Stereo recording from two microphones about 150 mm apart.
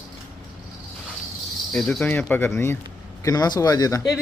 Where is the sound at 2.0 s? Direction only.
10° left (ahead or behind).